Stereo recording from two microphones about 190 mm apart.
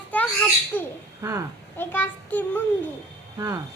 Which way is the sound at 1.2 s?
15° right (ahead or behind).